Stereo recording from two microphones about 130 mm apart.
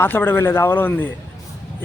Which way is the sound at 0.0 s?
15° left (ahead or behind).